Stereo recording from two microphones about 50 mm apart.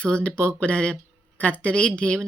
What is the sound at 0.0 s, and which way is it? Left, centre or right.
Speech, left.